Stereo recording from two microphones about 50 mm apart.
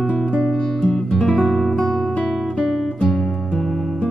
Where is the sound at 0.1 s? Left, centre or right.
Left.